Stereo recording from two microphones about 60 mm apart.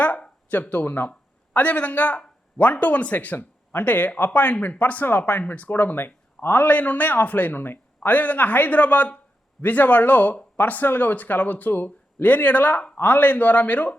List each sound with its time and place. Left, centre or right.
0.0 s speech: left
0.9 s a man's voice: left